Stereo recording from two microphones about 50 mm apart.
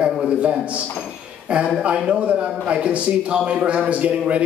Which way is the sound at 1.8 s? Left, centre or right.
Right.